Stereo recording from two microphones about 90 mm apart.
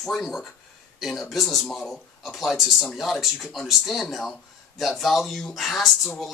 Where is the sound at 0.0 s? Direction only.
5° left (ahead or behind).